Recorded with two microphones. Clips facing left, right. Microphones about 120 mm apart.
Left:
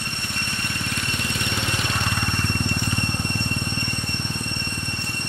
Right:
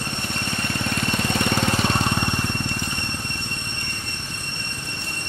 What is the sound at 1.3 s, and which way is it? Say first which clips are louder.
Vehicle: right 6 dB; 45° right (ahead or behind).